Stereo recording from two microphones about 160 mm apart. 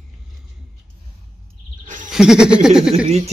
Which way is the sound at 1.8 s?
55° right (ahead or behind).